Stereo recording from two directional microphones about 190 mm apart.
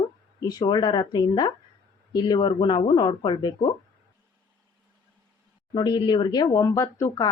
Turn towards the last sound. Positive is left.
turn(degrees=15)  # may be behind; listen again after turning